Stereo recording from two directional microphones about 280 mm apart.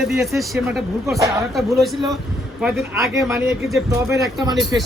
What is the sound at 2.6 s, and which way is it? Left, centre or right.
Speech, centre.